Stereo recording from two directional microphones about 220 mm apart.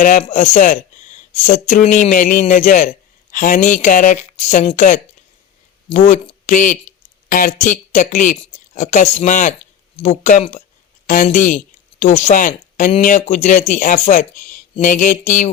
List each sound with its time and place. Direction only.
0.0 s speech: 35° left (ahead or behind)